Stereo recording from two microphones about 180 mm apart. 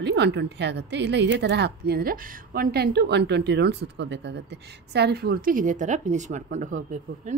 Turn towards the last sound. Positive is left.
turn(degrees=-45)  # may be behind; listen again after turning